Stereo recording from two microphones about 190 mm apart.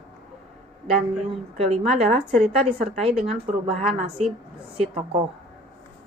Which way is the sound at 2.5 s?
30° right (ahead or behind).